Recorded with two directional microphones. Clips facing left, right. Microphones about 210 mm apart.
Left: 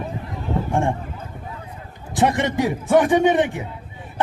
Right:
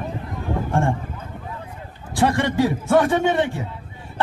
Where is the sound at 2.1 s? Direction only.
20° left (ahead or behind).